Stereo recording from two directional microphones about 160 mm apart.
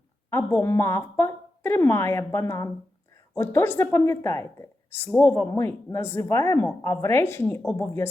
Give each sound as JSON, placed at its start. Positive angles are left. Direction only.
{"t": 0.3, "sound": "a woman's voice", "side_deg": 15}